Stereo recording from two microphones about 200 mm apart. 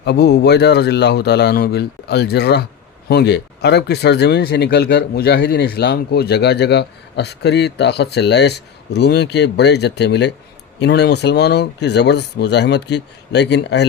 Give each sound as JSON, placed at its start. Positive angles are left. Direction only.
{"t": 0.0, "sound": "speech", "side_deg": 55}